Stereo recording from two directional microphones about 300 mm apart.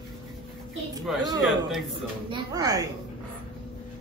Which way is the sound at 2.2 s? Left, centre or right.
Centre.